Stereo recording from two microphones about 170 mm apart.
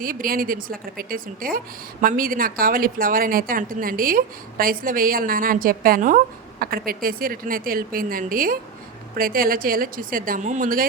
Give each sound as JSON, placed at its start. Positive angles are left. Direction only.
{"t": 0.0, "sound": "a woman's voice", "side_deg": -55}